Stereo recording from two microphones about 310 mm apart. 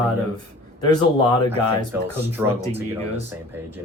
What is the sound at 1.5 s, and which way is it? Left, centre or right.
Speech, centre.